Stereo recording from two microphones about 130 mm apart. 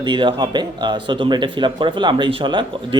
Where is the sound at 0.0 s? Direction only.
35° right (ahead or behind).